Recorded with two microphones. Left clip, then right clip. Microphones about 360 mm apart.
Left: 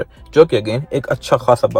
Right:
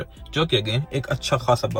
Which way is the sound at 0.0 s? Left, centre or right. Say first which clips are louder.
Left 14 dB; left.